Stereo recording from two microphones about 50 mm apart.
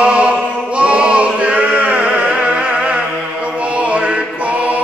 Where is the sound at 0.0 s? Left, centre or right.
Right.